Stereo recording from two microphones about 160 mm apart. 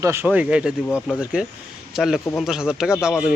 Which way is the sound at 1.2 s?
5° right (ahead or behind).